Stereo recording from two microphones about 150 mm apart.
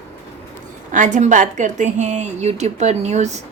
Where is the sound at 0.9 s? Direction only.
55° right (ahead or behind).